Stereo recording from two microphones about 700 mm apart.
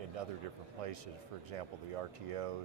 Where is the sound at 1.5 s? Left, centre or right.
Right.